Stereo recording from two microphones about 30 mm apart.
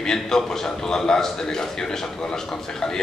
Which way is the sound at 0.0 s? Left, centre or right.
Left.